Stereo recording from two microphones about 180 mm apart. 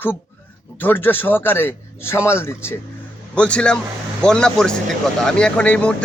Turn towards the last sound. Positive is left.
turn(degrees=5)  # may be behind; listen again after turning